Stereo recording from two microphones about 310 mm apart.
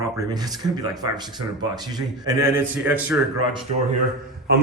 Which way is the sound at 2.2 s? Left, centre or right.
Centre.